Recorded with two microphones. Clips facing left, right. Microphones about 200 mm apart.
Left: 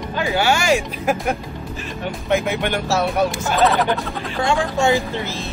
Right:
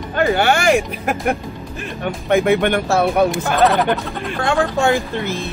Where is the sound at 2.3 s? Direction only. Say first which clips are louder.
Right 6 dB; 55° right (ahead or behind).